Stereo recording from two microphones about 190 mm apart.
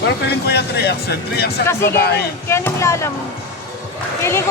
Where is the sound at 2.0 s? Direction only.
55° left (ahead or behind).